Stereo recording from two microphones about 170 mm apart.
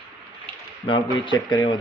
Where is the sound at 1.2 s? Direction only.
30° left (ahead or behind).